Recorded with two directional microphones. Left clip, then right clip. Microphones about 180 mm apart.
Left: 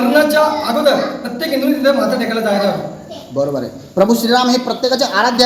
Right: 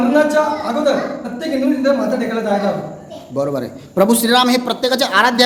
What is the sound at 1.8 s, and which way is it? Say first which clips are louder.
Speech: left 4 dB; 5° left (ahead or behind).